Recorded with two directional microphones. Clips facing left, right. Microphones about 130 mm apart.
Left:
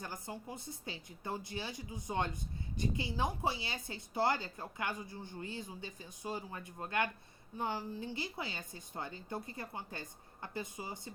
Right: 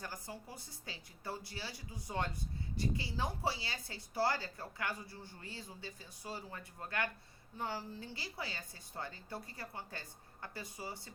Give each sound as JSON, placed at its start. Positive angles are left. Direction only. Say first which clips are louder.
{"t": 0.0, "sound": "speech", "louder": "left 3 dB", "side_deg": 20}